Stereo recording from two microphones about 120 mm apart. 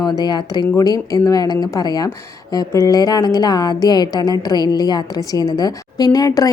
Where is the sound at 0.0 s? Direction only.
35° left (ahead or behind).